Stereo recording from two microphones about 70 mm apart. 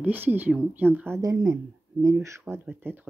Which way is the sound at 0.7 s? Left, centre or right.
Right.